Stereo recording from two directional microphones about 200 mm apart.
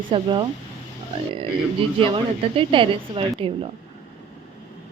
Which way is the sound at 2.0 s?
25° right (ahead or behind).